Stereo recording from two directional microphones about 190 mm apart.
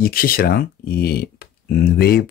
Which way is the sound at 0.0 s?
50° left (ahead or behind).